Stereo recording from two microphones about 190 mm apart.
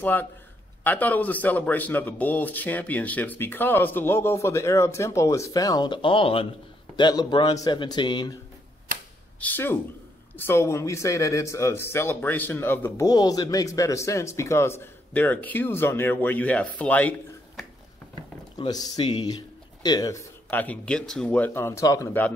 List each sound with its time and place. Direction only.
0.0 s a man's voice: 10° left (ahead or behind)
9.4 s speech: 10° left (ahead or behind)
18.6 s a man's voice: 20° left (ahead or behind)